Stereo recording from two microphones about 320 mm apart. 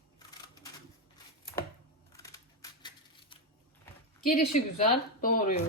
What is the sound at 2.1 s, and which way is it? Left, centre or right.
Camera, centre.